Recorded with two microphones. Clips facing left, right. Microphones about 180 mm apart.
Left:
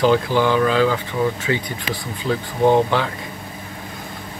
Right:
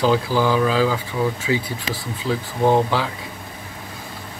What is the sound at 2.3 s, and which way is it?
Speech, centre (ahead or behind).